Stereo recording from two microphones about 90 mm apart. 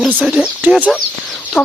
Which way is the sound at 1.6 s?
20° left (ahead or behind).